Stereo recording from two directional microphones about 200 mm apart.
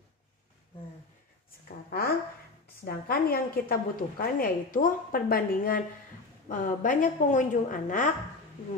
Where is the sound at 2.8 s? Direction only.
50° left (ahead or behind).